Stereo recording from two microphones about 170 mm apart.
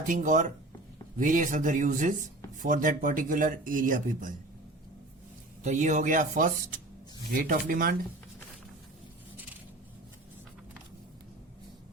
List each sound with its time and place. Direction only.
0.1 s speech: 50° right (ahead or behind)
5.6 s speech: 45° right (ahead or behind)